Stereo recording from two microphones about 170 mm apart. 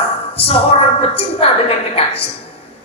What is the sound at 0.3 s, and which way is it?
A woman's voice, 35° left (ahead or behind).